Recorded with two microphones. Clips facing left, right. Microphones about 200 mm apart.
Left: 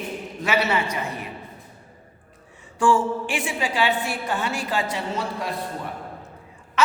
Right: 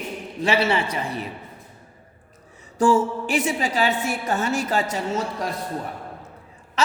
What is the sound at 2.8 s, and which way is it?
A woman's voice, 40° right (ahead or behind).